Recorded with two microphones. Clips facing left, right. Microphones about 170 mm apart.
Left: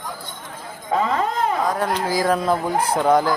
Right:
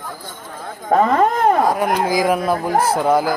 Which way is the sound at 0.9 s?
50° right (ahead or behind).